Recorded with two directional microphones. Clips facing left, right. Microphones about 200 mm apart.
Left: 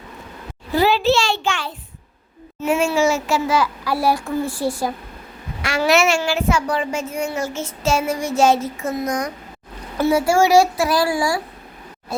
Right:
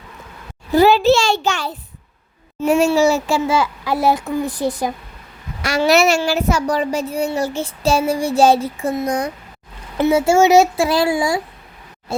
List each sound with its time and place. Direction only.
0.7 s a child's voice: 45° right (ahead or behind); by 4.9 s 20° right (ahead or behind)
5.6 s a child's voice: 35° right (ahead or behind); by 11.4 s 20° right (ahead or behind)